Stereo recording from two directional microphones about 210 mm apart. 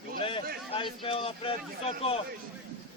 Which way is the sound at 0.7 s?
25° left (ahead or behind).